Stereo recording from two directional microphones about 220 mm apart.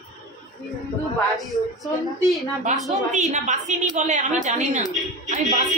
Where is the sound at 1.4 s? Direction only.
Centre (ahead or behind).